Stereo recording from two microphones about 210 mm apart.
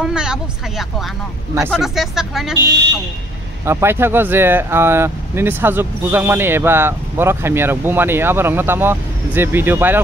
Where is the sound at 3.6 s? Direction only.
10° right (ahead or behind).